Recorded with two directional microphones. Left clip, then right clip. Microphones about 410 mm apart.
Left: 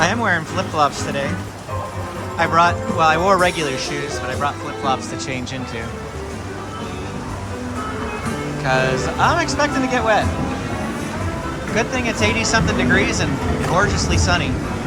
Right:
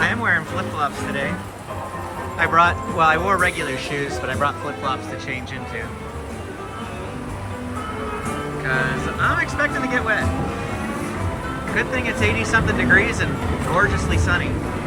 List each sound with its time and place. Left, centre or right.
0.0 s speech: centre
2.4 s speech: centre
9.2 s speech: centre
11.7 s speech: centre